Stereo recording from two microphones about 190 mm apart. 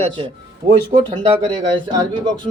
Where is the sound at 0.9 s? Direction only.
25° right (ahead or behind).